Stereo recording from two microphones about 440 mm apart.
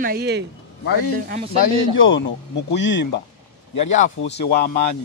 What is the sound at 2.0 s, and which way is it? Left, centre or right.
A man's voice, left.